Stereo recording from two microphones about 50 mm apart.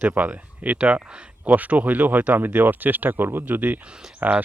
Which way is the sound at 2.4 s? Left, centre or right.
Right.